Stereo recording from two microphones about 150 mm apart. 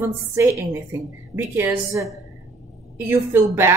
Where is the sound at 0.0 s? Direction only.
20° right (ahead or behind).